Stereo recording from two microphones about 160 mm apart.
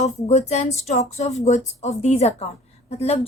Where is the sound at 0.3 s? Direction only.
45° left (ahead or behind).